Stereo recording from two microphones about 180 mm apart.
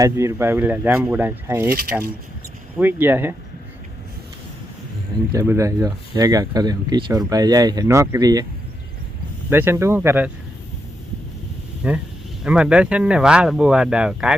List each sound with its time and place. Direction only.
0.0 s speech: 15° right (ahead or behind)
5.3 s speech: 15° right (ahead or behind)
9.5 s speech: 15° right (ahead or behind)
11.8 s speech: 5° right (ahead or behind)